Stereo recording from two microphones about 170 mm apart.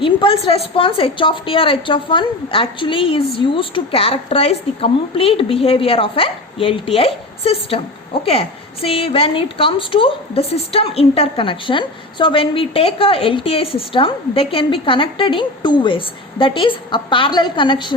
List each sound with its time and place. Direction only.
0.0 s a woman's voice: 30° left (ahead or behind)